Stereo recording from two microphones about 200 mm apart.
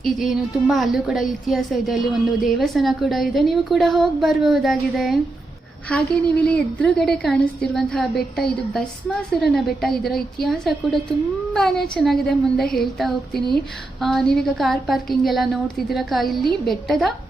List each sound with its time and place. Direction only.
0.0 s a woman's voice: centre (ahead or behind)